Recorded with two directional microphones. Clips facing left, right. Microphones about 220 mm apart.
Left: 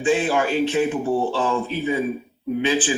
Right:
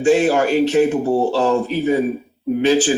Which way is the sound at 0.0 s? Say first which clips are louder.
Right 6 dB; 40° right (ahead or behind).